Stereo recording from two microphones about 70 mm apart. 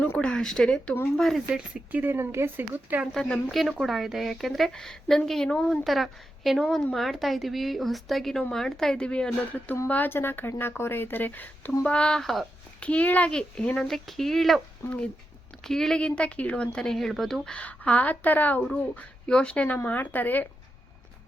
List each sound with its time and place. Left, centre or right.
0.2 s speech: centre
1.5 s speech: centre
1.9 s speech: right
2.1 s speech: right
3.1 s speech: centre
5.8 s a woman's voice: centre; by 11.7 s left
11.8 s a woman's voice: centre
12.8 s a woman's voice: centre
13.8 s speech: centre
14.8 s a woman's voice: centre
15.6 s speech: centre
16.0 s a woman's voice: centre
17.5 s speech: centre